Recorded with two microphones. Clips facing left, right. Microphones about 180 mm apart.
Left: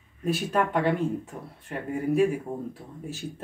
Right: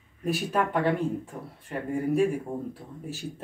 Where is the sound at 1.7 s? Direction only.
5° left (ahead or behind).